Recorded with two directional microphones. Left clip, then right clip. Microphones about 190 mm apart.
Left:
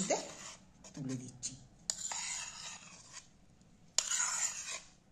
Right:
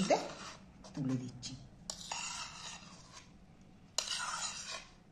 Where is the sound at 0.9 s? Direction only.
15° left (ahead or behind).